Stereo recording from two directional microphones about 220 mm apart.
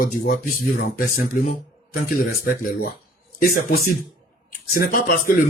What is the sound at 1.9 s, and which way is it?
A man's voice, 40° left (ahead or behind).